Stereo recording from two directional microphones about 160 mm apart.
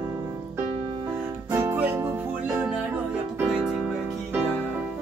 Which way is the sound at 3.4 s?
Centre (ahead or behind).